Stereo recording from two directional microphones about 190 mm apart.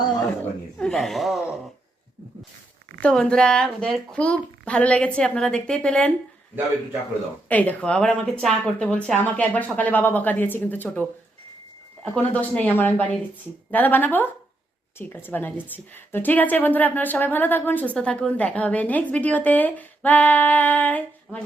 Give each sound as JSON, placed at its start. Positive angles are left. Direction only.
{"t": 0.8, "sound": "a child's voice", "side_deg": 0}
{"t": 2.9, "sound": "a child's voice", "side_deg": 5}
{"t": 6.5, "sound": "a man's voice", "side_deg": -10}
{"t": 7.4, "sound": "speech", "side_deg": 10}
{"t": 12.1, "sound": "speech", "side_deg": 5}